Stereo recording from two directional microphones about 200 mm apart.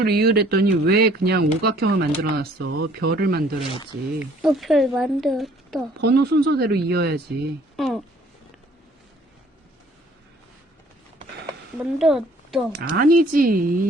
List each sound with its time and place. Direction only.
0.0 s speech: 50° right (ahead or behind)
4.2 s speech: centre (ahead or behind)
6.0 s speech: 55° right (ahead or behind)
7.8 s speech: centre (ahead or behind)
11.8 s speech: centre (ahead or behind)
12.8 s speech: 45° right (ahead or behind)